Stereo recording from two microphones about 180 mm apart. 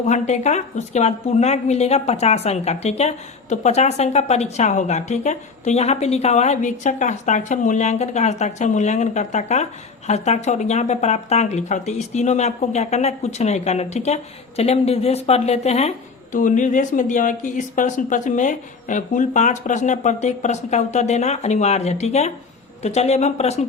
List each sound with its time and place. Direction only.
0.0 s speech: 40° left (ahead or behind)